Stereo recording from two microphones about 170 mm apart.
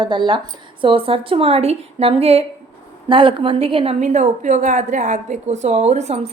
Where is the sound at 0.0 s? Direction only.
25° right (ahead or behind).